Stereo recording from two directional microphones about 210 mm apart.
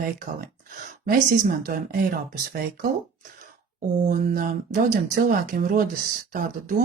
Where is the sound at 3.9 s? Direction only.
35° right (ahead or behind).